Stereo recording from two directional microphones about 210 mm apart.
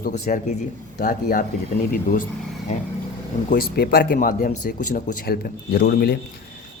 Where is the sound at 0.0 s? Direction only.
40° left (ahead or behind).